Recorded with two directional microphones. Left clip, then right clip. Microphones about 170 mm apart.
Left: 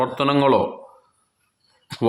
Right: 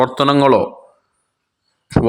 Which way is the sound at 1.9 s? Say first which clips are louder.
Right 11 dB; 10° right (ahead or behind).